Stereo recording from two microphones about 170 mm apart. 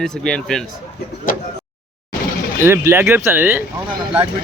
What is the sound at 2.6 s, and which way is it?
Speech, 15° right (ahead or behind).